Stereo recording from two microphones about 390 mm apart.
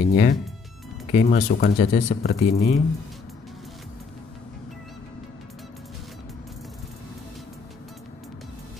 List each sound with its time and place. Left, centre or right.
0.1 s speech: centre